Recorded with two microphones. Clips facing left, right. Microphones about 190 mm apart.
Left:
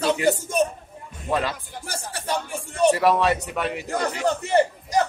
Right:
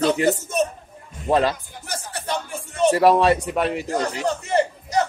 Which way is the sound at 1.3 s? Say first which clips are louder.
Right 6 dB; 40° right (ahead or behind).